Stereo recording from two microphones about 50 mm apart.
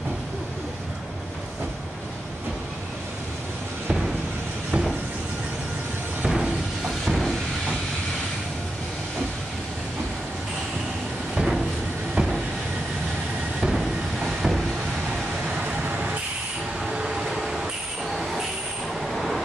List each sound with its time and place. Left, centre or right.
4.6 s a sound: centre
6.2 s a sound: centre
11.3 s vehicle: centre
12.2 s vehicle: right
13.6 s train: centre
15.5 s vehicle: right
16.8 s train: centre
19.1 s vehicle: centre